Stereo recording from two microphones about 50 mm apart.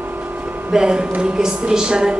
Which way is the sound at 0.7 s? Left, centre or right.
Centre.